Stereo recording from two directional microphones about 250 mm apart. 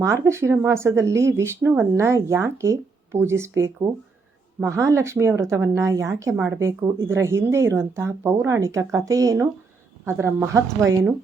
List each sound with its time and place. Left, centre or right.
0.0 s speech: centre